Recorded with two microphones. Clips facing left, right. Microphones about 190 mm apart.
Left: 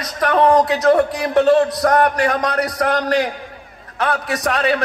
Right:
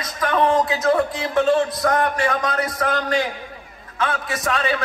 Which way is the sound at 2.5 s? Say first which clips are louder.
Left 3 dB; 40° left (ahead or behind).